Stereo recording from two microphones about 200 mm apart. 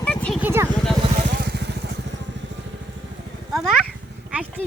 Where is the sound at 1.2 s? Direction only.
50° right (ahead or behind).